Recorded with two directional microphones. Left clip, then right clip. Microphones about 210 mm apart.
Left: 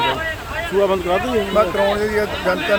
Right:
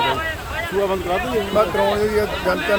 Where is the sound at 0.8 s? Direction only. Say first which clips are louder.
Left 4 dB; 45° left (ahead or behind).